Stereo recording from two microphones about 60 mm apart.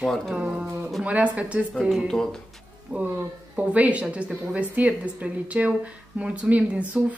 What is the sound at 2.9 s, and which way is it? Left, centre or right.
A woman's voice, right.